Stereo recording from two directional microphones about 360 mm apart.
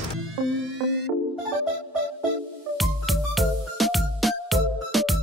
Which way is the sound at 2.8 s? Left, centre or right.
Centre.